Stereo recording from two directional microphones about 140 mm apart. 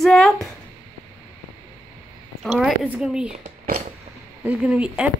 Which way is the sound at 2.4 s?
Centre (ahead or behind).